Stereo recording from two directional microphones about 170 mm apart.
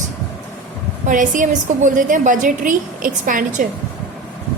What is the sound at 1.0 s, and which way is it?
A woman's voice, 50° right (ahead or behind).